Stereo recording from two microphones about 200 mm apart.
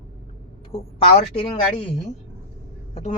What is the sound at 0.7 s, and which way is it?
Speech, 30° left (ahead or behind).